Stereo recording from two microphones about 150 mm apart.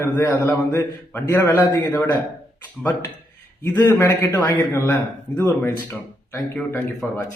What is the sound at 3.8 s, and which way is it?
A man's voice, 15° left (ahead or behind).